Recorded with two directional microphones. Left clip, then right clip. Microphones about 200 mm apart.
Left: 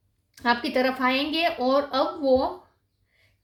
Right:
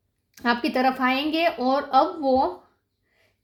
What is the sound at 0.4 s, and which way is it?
A woman's voice, 40° right (ahead or behind).